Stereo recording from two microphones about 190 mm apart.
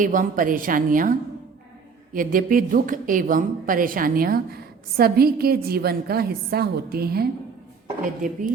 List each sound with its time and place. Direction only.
0.0 s a woman's voice: 45° right (ahead or behind)
2.1 s a woman's voice: 45° right (ahead or behind)